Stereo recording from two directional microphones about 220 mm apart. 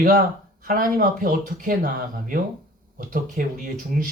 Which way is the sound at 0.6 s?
40° right (ahead or behind).